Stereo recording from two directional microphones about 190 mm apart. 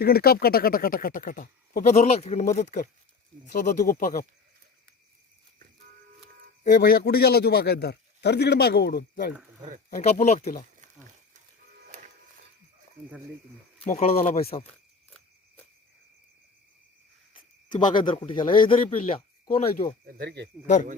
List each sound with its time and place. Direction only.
0.0 s speech: 55° left (ahead or behind)
6.7 s a man's voice: 45° left (ahead or behind)
9.9 s speech: 35° left (ahead or behind)
13.8 s speech: 35° left (ahead or behind)
17.3 s speech: 25° left (ahead or behind)
20.1 s speech: 55° right (ahead or behind)